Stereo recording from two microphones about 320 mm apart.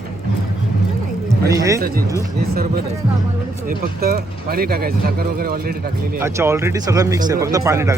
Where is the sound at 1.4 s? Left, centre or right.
Centre.